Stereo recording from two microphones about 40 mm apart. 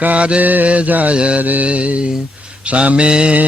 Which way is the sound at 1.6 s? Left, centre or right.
Right.